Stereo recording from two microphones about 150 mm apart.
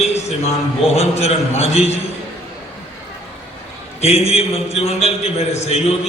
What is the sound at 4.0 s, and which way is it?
A man's voice, 45° left (ahead or behind).